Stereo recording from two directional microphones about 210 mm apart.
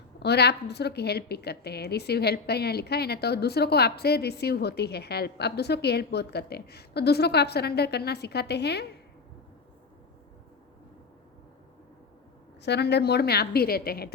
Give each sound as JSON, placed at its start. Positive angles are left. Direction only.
{"t": 0.2, "sound": "a woman's voice", "side_deg": 50}
{"t": 12.6, "sound": "a woman's voice", "side_deg": 55}